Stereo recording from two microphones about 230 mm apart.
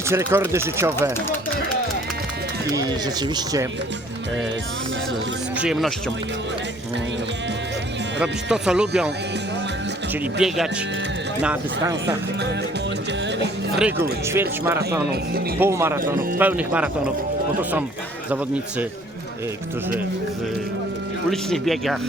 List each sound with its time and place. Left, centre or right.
0.1 s speech: centre
2.7 s speech: centre
5.5 s speech: centre
8.2 s speech: centre
10.4 s speech: centre
12.0 s speech: right
13.7 s speech: centre
21.2 s speech: centre